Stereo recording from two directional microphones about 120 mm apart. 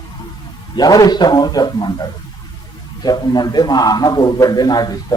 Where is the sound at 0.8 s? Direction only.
35° left (ahead or behind).